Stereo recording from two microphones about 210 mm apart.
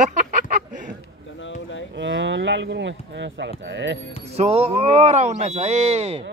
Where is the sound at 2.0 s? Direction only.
60° right (ahead or behind).